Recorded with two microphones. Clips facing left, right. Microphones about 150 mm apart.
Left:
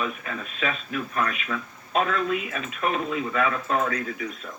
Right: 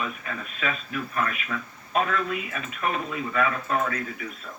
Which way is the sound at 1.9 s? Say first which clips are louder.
Left 2 dB; 25° left (ahead or behind).